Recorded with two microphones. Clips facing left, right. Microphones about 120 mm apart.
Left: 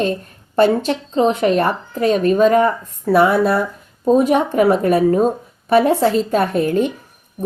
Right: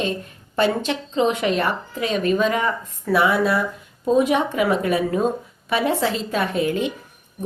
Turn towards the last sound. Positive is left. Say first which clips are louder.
# left 5 dB
turn(degrees=45)  # may be behind; listen again after turning